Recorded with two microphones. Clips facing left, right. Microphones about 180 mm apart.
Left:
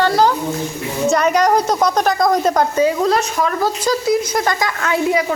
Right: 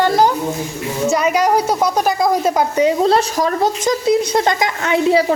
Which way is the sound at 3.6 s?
20° right (ahead or behind).